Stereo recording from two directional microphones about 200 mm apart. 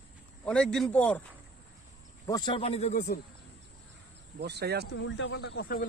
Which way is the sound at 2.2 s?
20° left (ahead or behind).